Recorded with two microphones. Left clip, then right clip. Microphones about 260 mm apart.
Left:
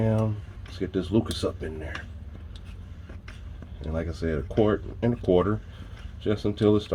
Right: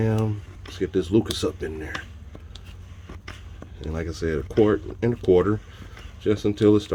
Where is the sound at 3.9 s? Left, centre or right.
Right.